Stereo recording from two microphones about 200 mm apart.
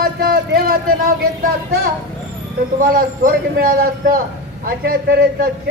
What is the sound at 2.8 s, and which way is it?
A man's voice, 45° right (ahead or behind).